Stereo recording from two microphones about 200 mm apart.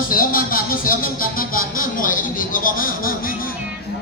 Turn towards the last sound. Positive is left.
turn(degrees=45)  # may be behind; listen again after turning